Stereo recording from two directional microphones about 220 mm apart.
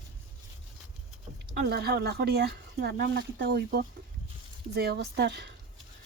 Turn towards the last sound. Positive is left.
turn(degrees=-50)  # may be behind; listen again after turning